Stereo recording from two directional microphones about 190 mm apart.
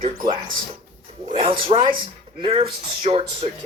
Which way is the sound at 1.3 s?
25° right (ahead or behind).